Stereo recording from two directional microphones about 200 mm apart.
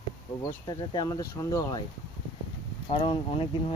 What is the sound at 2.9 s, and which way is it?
Speech, 25° left (ahead or behind).